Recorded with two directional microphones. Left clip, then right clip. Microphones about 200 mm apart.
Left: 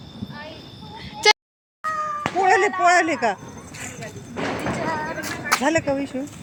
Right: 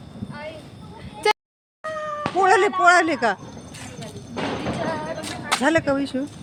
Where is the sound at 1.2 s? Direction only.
5° right (ahead or behind).